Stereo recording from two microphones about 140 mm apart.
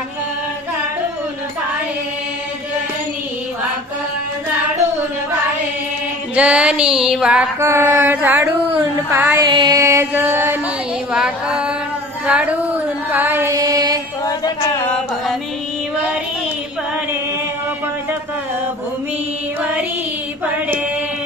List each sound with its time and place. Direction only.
6.3 s music: 10° right (ahead or behind)
7.6 s music: 15° right (ahead or behind)
9.5 s a sound: 30° right (ahead or behind); by 10.6 s 15° right (ahead or behind)
11.1 s music: 5° right (ahead or behind)
12.3 s female singing: 10° right (ahead or behind); by 13.9 s 25° right (ahead or behind)